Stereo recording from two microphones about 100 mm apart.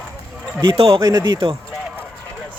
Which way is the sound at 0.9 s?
35° right (ahead or behind).